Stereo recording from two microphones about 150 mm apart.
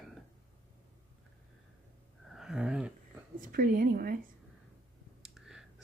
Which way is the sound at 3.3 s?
70° right (ahead or behind).